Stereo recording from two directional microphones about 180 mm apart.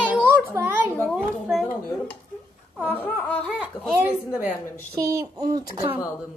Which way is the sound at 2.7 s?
10° left (ahead or behind).